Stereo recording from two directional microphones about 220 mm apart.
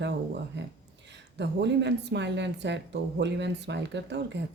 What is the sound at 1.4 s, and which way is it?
A woman's voice, 50° right (ahead or behind).